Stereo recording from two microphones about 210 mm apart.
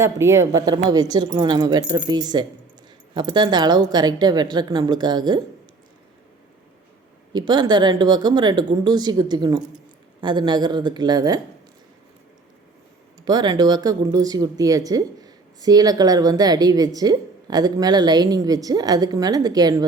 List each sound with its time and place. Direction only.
0.0 s speech: 15° right (ahead or behind)
7.3 s speech: 20° right (ahead or behind)
13.2 s speech: 20° right (ahead or behind)